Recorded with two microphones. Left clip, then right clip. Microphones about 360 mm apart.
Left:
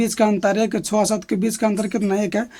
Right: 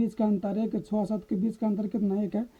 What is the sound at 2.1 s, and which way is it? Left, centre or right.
Speech, right.